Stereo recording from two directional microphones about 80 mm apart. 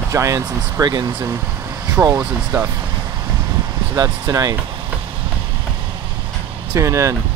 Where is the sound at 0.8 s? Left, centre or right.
Right.